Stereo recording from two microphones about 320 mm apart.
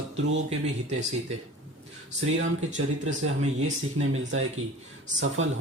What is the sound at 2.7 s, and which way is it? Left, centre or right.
Speech, right.